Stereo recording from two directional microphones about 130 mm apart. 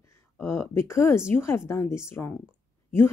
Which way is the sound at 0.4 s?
20° left (ahead or behind).